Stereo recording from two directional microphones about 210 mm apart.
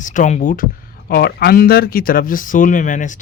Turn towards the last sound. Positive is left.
turn(degrees=35)  # may be behind; listen again after turning